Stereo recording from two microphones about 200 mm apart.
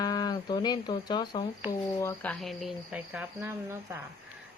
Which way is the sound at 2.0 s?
10° left (ahead or behind).